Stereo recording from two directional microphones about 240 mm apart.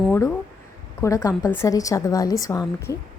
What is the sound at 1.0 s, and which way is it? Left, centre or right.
A woman's voice, centre.